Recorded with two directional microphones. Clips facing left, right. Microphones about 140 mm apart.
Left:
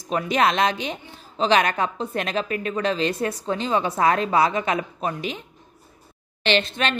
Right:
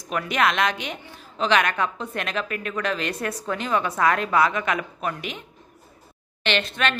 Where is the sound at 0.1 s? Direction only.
30° left (ahead or behind).